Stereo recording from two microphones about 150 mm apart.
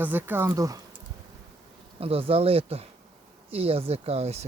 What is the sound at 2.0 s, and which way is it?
Speech, 40° right (ahead or behind).